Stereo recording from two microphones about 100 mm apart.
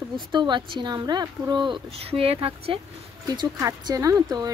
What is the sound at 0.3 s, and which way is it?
Speech, 50° right (ahead or behind).